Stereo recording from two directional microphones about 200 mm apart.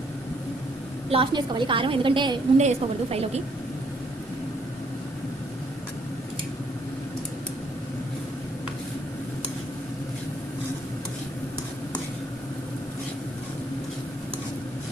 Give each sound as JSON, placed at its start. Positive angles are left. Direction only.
{"t": 1.1, "sound": "a woman's voice", "side_deg": -25}